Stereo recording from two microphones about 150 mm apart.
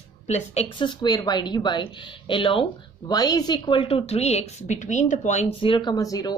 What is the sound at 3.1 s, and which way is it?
A woman's voice, 25° left (ahead or behind).